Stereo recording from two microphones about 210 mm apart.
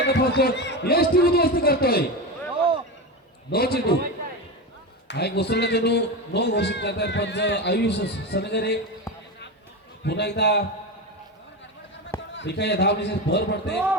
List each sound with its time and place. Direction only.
0.0 s a man's voice: 45° left (ahead or behind)
2.6 s a sound: 25° right (ahead or behind)
3.5 s a man's voice: 45° left (ahead or behind)
5.0 s a man's voice: 50° left (ahead or behind)
10.0 s a man's voice: 55° left (ahead or behind)
12.3 s a man's voice: 55° left (ahead or behind)